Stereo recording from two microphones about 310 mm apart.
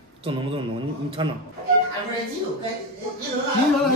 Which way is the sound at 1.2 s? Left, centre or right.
Centre.